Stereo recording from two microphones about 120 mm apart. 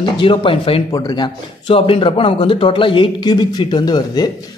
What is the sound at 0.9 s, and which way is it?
Speech, 35° left (ahead or behind).